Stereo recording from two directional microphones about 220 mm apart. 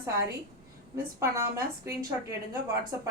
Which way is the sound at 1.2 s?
10° right (ahead or behind).